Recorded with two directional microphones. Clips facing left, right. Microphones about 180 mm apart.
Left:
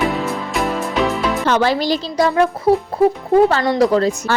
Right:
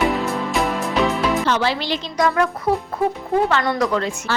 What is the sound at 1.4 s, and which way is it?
A woman's voice, 50° left (ahead or behind).